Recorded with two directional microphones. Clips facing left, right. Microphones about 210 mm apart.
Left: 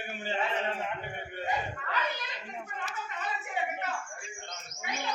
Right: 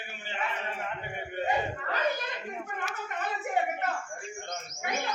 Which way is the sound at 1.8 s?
45° right (ahead or behind).